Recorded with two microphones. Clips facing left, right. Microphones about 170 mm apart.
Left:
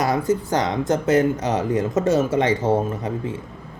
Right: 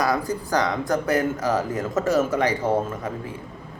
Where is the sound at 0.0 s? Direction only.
25° left (ahead or behind).